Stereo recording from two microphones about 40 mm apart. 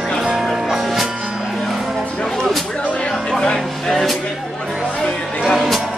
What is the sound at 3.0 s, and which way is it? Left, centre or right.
Music, left.